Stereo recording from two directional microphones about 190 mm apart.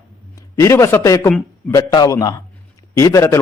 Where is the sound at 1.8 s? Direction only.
20° left (ahead or behind).